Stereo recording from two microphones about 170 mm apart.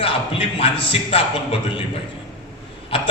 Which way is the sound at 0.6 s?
35° left (ahead or behind).